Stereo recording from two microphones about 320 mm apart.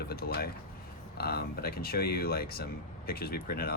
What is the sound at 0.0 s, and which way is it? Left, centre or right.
Speech, left.